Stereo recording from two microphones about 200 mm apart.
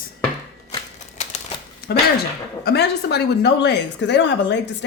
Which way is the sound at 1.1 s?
35° left (ahead or behind).